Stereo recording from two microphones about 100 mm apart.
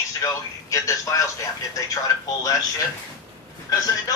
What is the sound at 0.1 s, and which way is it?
Speech, 35° left (ahead or behind).